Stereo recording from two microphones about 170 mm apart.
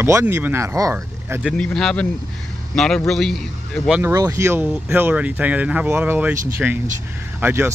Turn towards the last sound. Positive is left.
turn(degrees=-15)  # may be behind; listen again after turning